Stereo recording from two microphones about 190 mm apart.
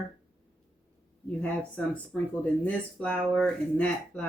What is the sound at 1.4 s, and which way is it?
Speech, 5° left (ahead or behind).